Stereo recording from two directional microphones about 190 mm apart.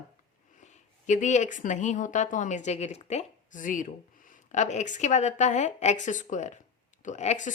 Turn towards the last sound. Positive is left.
turn(degrees=40)  # may be behind; listen again after turning